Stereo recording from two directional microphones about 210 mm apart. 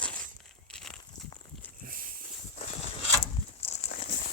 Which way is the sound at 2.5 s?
30° left (ahead or behind).